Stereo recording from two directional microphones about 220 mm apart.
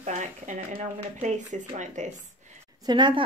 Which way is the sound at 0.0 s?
35° right (ahead or behind).